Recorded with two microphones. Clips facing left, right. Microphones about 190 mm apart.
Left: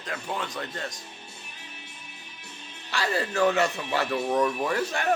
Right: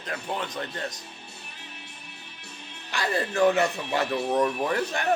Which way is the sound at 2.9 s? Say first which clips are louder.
Even; 15° right (ahead or behind).